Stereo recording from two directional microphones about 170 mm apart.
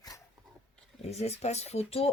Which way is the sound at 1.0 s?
40° left (ahead or behind).